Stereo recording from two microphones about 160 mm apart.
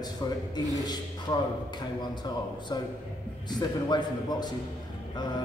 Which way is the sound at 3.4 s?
25° left (ahead or behind).